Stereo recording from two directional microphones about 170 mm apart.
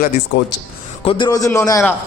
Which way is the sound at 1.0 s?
30° left (ahead or behind).